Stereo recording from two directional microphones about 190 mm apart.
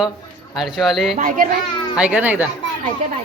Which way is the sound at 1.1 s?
45° right (ahead or behind).